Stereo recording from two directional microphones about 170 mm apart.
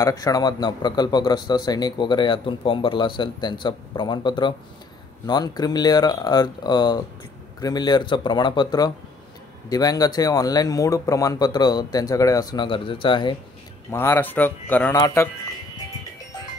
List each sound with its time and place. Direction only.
0.0 s speech: 20° left (ahead or behind)
13.8 s speech: 15° left (ahead or behind)